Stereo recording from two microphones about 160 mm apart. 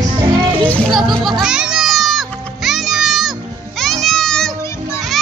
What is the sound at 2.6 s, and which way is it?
Music, centre (ahead or behind).